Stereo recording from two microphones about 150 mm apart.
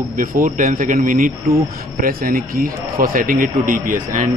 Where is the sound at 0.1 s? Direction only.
65° right (ahead or behind).